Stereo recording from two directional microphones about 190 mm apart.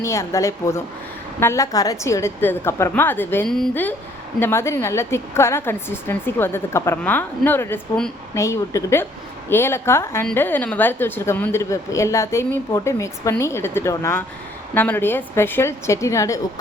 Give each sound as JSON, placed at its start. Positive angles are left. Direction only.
{"t": 0.0, "sound": "a woman's voice", "side_deg": 15}